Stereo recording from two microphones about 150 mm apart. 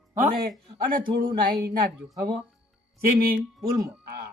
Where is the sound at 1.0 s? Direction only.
75° right (ahead or behind).